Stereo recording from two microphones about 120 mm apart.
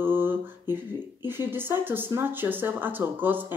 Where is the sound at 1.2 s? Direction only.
20° right (ahead or behind).